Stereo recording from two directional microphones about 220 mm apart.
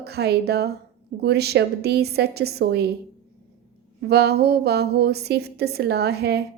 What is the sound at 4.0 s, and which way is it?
Speech, 45° right (ahead or behind).